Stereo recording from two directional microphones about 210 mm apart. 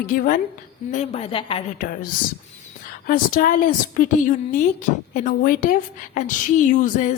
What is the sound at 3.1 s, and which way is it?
A woman's voice, 40° left (ahead or behind).